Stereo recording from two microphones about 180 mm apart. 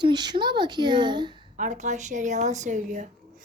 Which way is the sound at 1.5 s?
45° right (ahead or behind).